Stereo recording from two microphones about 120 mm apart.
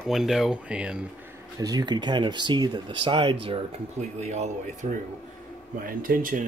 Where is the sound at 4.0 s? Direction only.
70° right (ahead or behind).